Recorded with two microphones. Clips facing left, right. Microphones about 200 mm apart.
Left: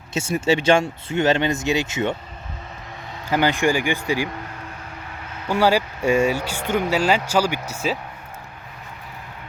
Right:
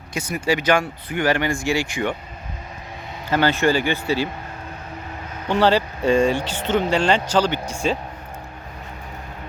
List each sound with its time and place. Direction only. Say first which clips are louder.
0.1 s speech: left 2 dB; 25° left (ahead or behind)
3.2 s speech: right 1 dB; 15° left (ahead or behind)
5.5 s speech: right 1 dB; 10° left (ahead or behind)